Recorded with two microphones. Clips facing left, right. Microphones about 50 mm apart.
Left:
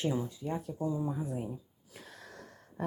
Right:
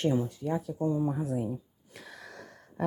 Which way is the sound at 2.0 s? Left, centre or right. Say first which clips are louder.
Right 4 dB; right.